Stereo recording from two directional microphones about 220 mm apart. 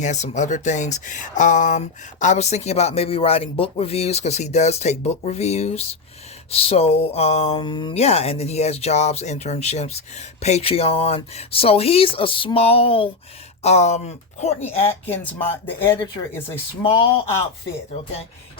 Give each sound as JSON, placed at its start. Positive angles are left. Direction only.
{"t": 0.0, "sound": "speech", "side_deg": 35}
{"t": 14.8, "sound": "speech", "side_deg": 10}
{"t": 16.8, "sound": "speech", "side_deg": 25}